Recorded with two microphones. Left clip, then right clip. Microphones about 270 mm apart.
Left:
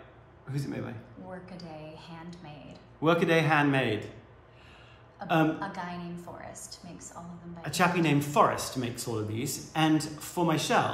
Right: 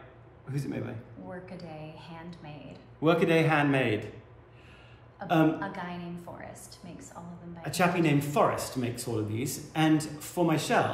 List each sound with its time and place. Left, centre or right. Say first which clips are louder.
0.5 s speech: right 1 dB; centre
5.2 s speech: right 1 dB; centre